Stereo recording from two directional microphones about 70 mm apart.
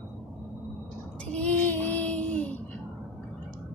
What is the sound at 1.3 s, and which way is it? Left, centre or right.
Child singing, left.